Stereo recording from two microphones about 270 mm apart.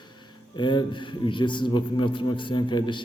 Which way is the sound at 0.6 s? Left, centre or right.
Centre.